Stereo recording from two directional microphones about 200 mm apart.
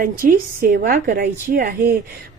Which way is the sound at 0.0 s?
45° right (ahead or behind).